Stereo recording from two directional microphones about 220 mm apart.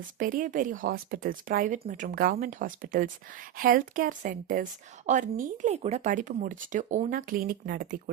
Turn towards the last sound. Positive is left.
turn(degrees=-45)  # may be behind; listen again after turning